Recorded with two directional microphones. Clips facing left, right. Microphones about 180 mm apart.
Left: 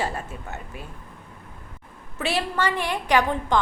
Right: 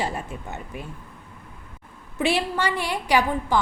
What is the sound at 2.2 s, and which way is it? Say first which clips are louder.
A woman's voice: right 2 dB; 15° right (ahead or behind).